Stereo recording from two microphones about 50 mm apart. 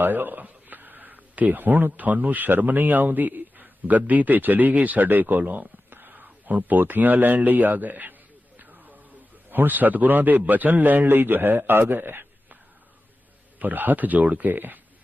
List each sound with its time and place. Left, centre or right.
0.0 s speech: right
8.5 s a sound: right
9.5 s a man's voice: right
13.6 s a man's voice: right